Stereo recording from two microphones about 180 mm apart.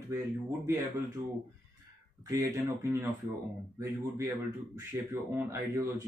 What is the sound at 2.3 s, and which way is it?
Speech, 20° right (ahead or behind).